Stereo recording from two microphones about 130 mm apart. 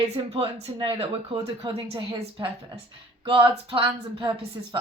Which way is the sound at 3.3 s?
40° right (ahead or behind).